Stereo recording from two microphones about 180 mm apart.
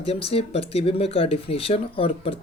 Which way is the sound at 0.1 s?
30° left (ahead or behind).